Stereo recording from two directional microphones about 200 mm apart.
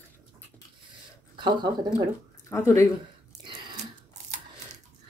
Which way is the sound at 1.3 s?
25° right (ahead or behind).